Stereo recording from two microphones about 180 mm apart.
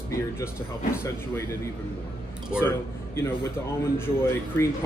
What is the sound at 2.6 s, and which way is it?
A man's voice, 15° left (ahead or behind).